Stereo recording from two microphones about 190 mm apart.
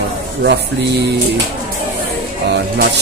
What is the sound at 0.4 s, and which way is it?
Speech, 65° right (ahead or behind).